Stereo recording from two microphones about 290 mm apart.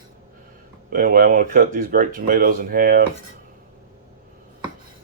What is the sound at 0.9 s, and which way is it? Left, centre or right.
Speech, right.